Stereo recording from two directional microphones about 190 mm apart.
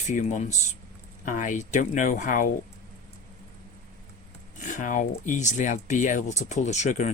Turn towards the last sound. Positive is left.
turn(degrees=40)  # may be behind; listen again after turning